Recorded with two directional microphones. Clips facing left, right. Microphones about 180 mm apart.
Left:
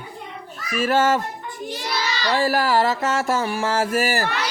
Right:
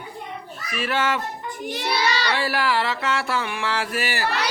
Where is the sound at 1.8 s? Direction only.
65° right (ahead or behind).